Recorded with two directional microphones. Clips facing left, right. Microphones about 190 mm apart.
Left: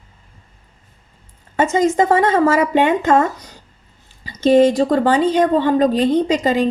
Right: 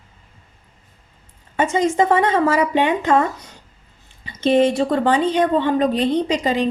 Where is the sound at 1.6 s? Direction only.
45° left (ahead or behind).